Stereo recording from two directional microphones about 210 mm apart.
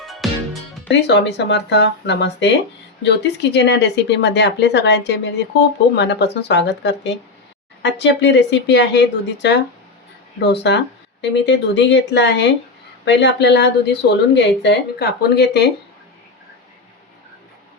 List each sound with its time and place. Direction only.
0.0 s music: centre (ahead or behind)
0.9 s speech: 55° left (ahead or behind)